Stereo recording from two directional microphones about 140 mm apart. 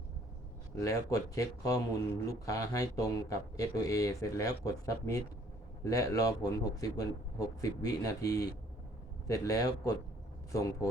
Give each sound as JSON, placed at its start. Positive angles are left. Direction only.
{"t": 0.8, "sound": "speech", "side_deg": 20}